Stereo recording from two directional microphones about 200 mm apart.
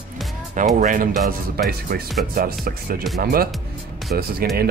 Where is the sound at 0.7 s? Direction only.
40° right (ahead or behind).